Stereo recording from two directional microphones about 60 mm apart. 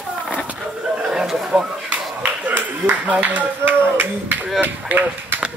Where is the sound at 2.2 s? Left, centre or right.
Right.